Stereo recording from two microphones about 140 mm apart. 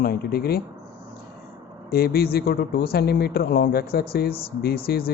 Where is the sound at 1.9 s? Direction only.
90° left.